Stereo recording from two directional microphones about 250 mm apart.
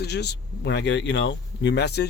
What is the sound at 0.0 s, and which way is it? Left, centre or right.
Speech, left.